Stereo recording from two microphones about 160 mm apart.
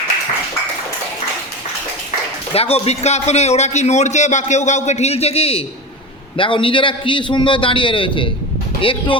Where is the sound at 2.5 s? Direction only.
40° left (ahead or behind).